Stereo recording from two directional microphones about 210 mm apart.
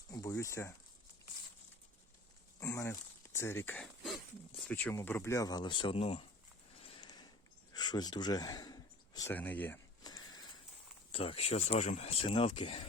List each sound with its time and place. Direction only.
0.1 s speech: 15° left (ahead or behind)
2.6 s speech: 15° left (ahead or behind)
6.8 s a sound: 20° left (ahead or behind)
11.1 s speech: 25° left (ahead or behind)